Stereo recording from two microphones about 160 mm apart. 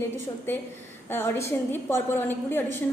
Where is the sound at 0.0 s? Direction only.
15° left (ahead or behind).